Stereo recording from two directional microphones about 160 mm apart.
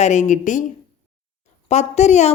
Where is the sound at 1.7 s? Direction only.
45° left (ahead or behind).